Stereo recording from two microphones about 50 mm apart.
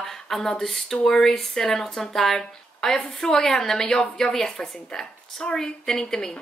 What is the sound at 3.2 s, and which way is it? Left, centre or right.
A woman's voice, centre.